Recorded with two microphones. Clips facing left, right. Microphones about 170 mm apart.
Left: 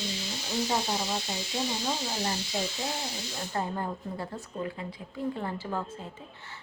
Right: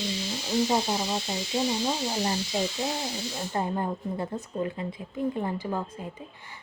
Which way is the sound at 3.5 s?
20° right (ahead or behind).